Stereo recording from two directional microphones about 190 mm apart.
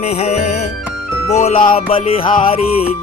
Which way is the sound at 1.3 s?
35° left (ahead or behind).